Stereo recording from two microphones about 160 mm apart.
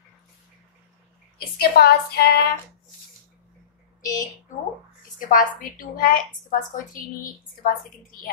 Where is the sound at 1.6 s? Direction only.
85° left.